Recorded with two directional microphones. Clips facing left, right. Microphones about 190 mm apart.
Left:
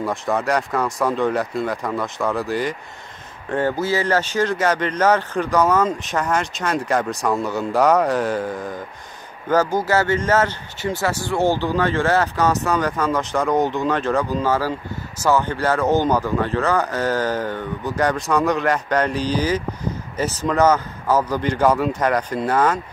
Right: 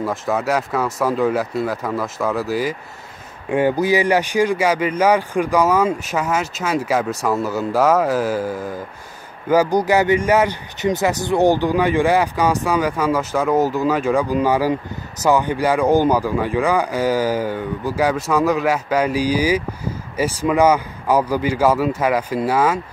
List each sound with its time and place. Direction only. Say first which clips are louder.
0.0 s a man's voice: right 1 dB; 5° right (ahead or behind)